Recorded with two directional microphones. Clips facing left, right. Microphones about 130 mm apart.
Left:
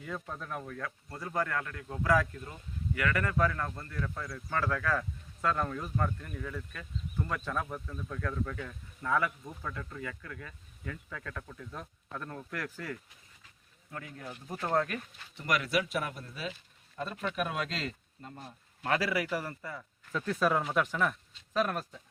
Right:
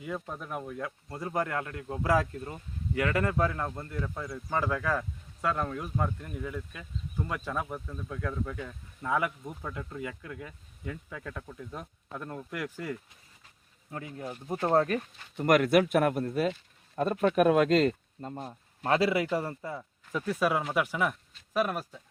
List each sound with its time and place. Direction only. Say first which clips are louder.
0.0 s speech: right 3 dB; 10° right (ahead or behind); by 18.9 s 40° right (ahead or behind)
18.9 s speech: right 5 dB; 25° right (ahead or behind)
20.1 s speech: right 1 dB; 10° right (ahead or behind)